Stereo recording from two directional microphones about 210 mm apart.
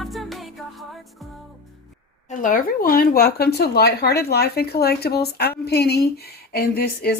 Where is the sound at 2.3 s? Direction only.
40° left (ahead or behind).